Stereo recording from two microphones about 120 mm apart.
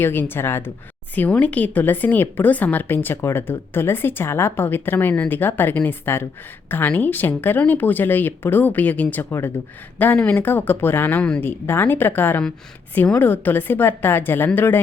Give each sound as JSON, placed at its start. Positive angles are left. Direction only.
{"t": 0.0, "sound": "a woman's voice", "side_deg": 15}